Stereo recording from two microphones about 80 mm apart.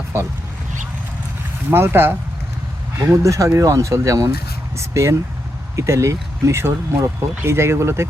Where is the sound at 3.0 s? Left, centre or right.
Right.